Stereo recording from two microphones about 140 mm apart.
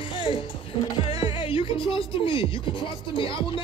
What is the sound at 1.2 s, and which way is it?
Speech, 40° left (ahead or behind).